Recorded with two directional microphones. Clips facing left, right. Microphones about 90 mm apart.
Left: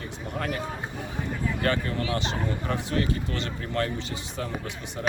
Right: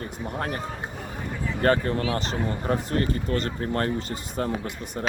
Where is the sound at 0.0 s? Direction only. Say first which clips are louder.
Right 2 dB; 35° right (ahead or behind).